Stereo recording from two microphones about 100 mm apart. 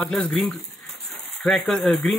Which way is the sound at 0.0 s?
15° left (ahead or behind).